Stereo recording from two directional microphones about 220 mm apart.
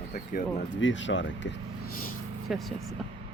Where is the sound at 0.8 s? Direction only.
55° left (ahead or behind).